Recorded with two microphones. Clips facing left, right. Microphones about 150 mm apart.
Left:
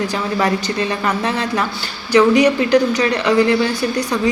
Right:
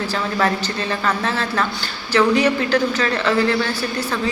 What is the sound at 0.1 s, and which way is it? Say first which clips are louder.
A woman's voice: left 2 dB; 15° left (ahead or behind).